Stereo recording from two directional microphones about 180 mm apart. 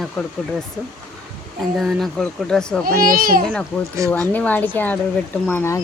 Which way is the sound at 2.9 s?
55° right (ahead or behind).